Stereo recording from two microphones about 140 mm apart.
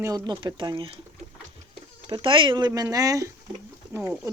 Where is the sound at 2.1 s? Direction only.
35° right (ahead or behind).